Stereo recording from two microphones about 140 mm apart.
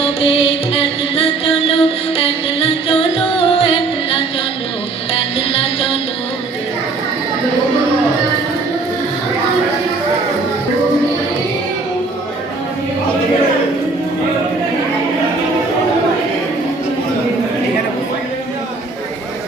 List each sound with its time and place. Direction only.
0.0 s music: 45° left (ahead or behind)